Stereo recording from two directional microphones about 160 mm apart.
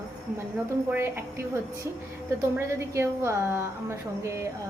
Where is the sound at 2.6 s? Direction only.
15° right (ahead or behind).